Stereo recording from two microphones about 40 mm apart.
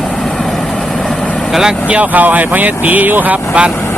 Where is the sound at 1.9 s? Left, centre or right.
Right.